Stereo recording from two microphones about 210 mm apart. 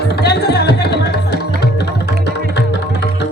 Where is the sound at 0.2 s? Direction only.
50° left (ahead or behind).